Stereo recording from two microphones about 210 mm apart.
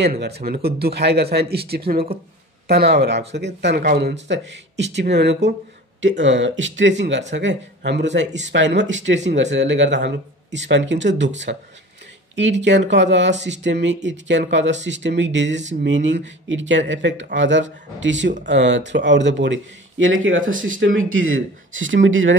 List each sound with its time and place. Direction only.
0.0 s a man's voice: 50° right (ahead or behind)